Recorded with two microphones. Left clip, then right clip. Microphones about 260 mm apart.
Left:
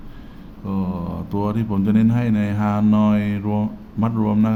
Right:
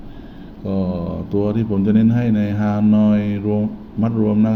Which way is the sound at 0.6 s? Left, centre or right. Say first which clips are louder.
Right 4 dB; centre.